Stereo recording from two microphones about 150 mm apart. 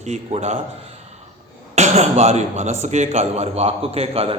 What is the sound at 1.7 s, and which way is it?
A man's voice, 50° right (ahead or behind).